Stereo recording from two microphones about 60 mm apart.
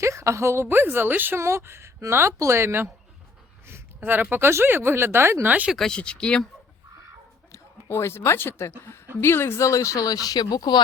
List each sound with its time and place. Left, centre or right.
0.0 s a woman's voice: right
1.4 s speech: right
3.7 s a woman's voice: right
5.7 s speech: centre
7.9 s speech: left